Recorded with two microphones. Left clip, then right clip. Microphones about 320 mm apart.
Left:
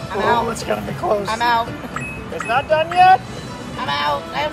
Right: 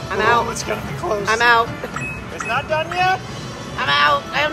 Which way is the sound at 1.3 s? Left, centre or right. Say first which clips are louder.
Right 7 dB; right.